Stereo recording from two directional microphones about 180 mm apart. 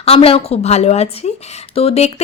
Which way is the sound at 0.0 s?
35° left (ahead or behind).